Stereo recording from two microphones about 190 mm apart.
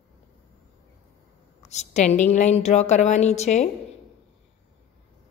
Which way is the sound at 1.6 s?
35° left (ahead or behind).